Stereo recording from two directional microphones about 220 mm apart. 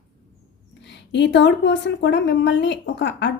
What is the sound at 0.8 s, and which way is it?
A woman's voice, 55° left (ahead or behind).